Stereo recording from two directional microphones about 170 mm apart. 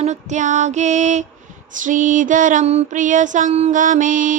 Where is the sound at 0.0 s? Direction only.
45° right (ahead or behind).